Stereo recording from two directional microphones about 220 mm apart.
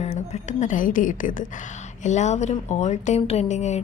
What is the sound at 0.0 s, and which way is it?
A woman's voice, 30° left (ahead or behind).